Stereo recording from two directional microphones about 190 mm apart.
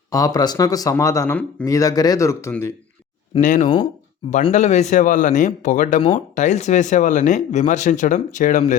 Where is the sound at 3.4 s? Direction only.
45° left (ahead or behind).